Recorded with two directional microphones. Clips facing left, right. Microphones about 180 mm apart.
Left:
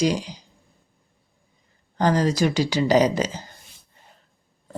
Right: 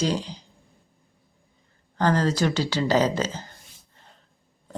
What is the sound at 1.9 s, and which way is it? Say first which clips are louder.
Speech: left 2 dB; 15° left (ahead or behind).